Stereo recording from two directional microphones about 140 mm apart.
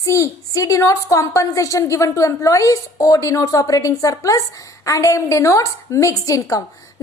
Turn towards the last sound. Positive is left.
turn(degrees=25)  # may be behind; listen again after turning